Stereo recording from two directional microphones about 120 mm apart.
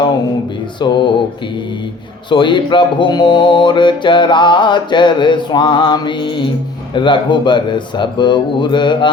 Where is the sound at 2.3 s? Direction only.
40° left (ahead or behind).